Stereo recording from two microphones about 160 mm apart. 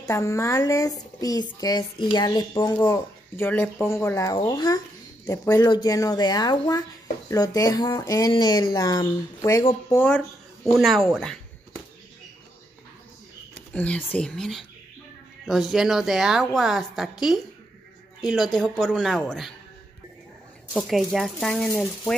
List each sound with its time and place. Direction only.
0.0 s speech: 20° left (ahead or behind)
10.0 s speech: centre (ahead or behind)
13.7 s a woman's voice: 10° left (ahead or behind)
20.7 s a woman's voice: centre (ahead or behind)